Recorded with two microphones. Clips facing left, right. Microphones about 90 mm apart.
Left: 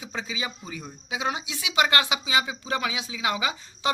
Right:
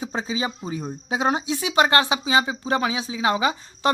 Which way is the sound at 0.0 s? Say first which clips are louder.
Right 6 dB; 35° right (ahead or behind).